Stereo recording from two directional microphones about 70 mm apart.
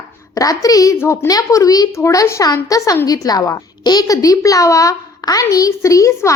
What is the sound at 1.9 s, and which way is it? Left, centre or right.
A child's voice, left.